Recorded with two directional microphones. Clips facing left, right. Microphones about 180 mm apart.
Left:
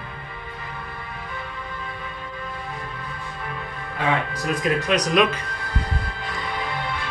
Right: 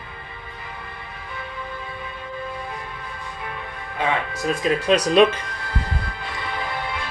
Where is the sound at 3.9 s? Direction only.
25° right (ahead or behind).